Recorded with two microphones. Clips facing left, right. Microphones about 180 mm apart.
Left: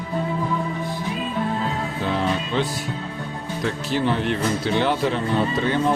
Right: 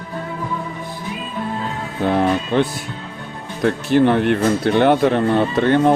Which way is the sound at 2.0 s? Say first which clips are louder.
Right 8 dB; 55° right (ahead or behind).